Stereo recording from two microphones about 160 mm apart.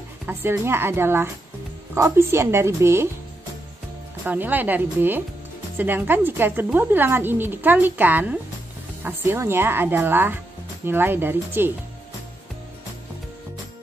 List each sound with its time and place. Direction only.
0.3 s a woman's voice: 15° right (ahead or behind)
4.3 s a woman's voice: 10° right (ahead or behind)